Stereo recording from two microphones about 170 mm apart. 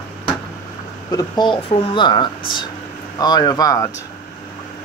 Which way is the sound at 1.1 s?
25° left (ahead or behind).